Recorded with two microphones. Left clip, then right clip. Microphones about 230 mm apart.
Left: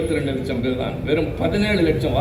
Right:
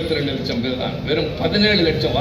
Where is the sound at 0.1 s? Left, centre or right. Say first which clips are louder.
Right 1 dB; left.